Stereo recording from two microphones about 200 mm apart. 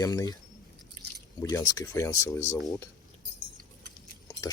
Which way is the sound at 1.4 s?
15° left (ahead or behind).